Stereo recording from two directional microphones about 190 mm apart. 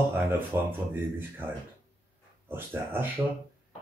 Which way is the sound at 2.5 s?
10° right (ahead or behind).